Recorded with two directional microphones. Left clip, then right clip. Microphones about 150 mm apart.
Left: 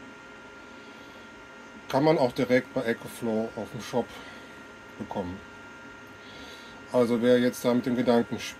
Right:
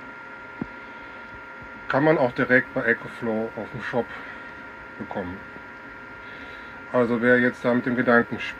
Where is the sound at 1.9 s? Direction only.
25° left (ahead or behind).